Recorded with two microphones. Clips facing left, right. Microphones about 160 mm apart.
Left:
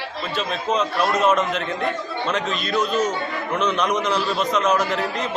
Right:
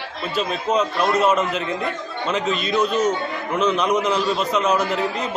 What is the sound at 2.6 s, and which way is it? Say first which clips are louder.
A man's voice: right 2 dB; 10° right (ahead or behind).